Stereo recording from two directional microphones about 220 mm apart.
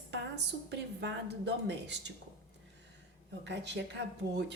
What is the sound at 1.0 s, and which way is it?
A woman's voice, 50° right (ahead or behind).